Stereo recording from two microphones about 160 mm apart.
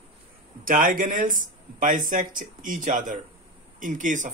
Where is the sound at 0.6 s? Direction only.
60° right (ahead or behind).